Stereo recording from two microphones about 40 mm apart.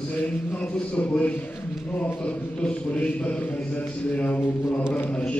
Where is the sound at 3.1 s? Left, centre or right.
Left.